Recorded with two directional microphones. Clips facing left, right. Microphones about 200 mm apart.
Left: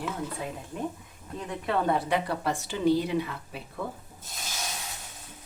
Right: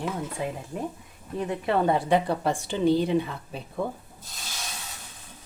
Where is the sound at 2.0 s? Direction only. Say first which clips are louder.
Right 4 dB; 25° right (ahead or behind).